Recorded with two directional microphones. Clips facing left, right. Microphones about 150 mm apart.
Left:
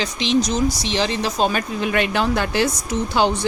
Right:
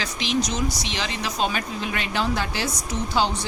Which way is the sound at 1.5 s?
55° left (ahead or behind).